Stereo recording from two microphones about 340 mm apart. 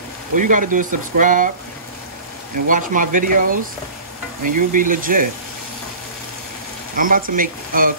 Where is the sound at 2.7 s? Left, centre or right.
Right.